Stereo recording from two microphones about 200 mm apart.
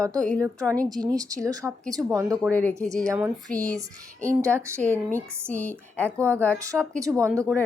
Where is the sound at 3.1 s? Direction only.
15° right (ahead or behind).